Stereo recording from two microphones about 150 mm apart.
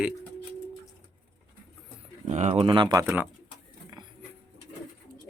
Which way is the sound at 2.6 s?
35° right (ahead or behind).